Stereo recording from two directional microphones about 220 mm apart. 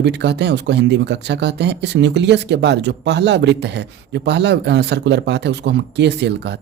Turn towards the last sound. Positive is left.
turn(degrees=-50)  # may be behind; listen again after turning